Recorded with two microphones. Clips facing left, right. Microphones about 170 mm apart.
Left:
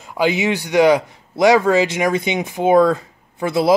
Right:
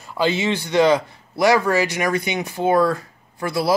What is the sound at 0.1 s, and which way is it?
A man's voice, 15° left (ahead or behind).